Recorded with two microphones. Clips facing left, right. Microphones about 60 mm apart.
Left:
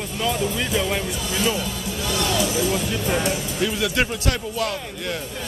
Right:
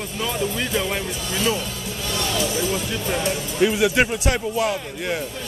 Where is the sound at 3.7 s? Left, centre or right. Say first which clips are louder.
Right 4 dB; centre.